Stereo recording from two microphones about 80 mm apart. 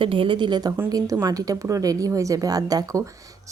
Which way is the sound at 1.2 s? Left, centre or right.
Right.